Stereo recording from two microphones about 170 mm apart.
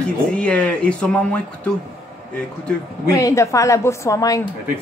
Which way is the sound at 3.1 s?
20° left (ahead or behind).